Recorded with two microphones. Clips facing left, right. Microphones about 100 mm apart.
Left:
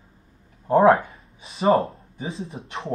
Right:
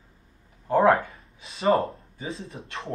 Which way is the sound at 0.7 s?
25° left (ahead or behind).